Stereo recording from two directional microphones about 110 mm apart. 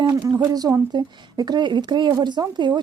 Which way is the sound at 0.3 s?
30° right (ahead or behind).